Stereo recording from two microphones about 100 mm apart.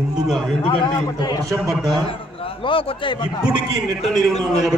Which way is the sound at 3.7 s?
Centre (ahead or behind).